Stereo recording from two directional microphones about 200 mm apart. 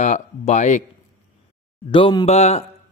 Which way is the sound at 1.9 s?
20° left (ahead or behind).